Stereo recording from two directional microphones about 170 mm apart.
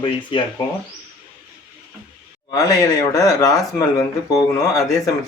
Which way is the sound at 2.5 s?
20° left (ahead or behind).